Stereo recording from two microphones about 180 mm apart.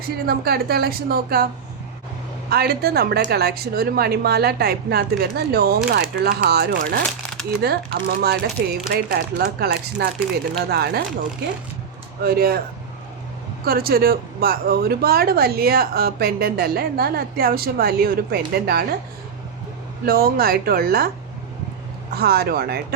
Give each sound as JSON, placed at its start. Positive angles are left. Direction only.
{"t": 0.3, "sound": "speech", "side_deg": -60}
{"t": 2.5, "sound": "speech", "side_deg": -60}
{"t": 12.2, "sound": "speech", "side_deg": -60}
{"t": 13.7, "sound": "speech", "side_deg": -55}
{"t": 20.1, "sound": "speech", "side_deg": -55}
{"t": 22.1, "sound": "speech", "side_deg": -60}